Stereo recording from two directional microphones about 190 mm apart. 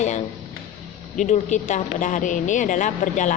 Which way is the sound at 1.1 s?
40° left (ahead or behind).